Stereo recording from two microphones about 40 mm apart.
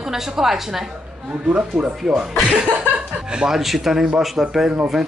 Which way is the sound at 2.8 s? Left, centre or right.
Right.